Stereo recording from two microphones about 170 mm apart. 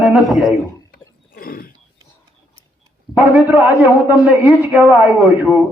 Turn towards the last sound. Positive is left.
turn(degrees=-10)  # may be behind; listen again after turning